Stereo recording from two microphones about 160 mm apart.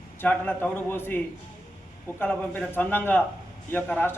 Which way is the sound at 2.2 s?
10° left (ahead or behind).